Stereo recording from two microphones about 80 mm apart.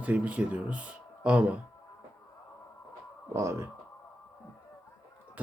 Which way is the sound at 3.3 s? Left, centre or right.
Right.